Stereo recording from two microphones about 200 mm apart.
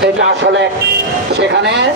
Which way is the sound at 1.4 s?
60° right (ahead or behind).